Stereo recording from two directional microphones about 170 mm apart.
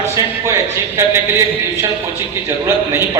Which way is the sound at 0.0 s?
15° right (ahead or behind).